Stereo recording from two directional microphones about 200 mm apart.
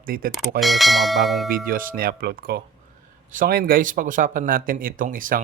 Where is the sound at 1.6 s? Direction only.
45° right (ahead or behind).